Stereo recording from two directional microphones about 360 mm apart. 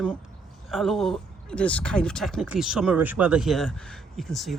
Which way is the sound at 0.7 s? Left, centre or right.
Centre.